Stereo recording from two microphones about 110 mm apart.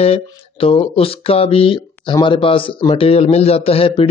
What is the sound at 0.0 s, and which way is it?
Speech, 65° left (ahead or behind).